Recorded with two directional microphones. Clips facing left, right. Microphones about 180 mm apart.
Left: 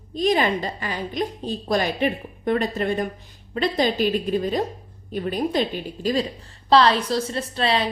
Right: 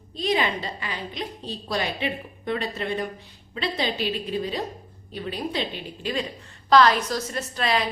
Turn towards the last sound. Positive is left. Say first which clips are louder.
# left 3 dB
turn(degrees=30)  # may be behind; listen again after turning